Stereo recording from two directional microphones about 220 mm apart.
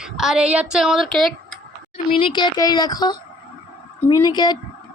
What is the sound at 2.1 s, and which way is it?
A woman's voice, 20° left (ahead or behind).